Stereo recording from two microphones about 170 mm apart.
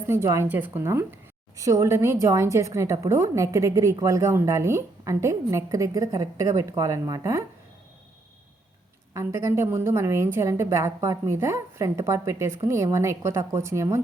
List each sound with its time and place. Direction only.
0.1 s a woman's voice: 15° right (ahead or behind)
9.1 s a woman's voice: 15° right (ahead or behind)